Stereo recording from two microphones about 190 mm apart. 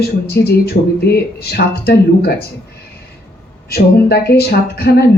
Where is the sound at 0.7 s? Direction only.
45° left (ahead or behind).